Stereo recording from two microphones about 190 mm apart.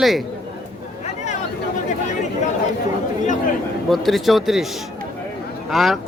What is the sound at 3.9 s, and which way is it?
Speech, centre (ahead or behind).